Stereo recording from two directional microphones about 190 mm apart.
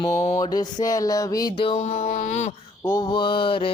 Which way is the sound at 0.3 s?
20° left (ahead or behind).